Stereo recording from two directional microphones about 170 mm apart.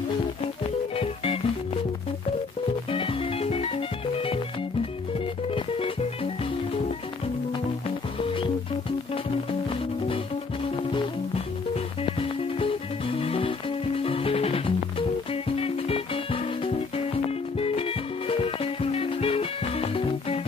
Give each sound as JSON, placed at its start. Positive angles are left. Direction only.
{"t": 0.9, "sound": "music", "side_deg": 35}
{"t": 2.9, "sound": "music", "side_deg": 30}
{"t": 5.5, "sound": "music", "side_deg": 35}
{"t": 8.2, "sound": "music", "side_deg": 30}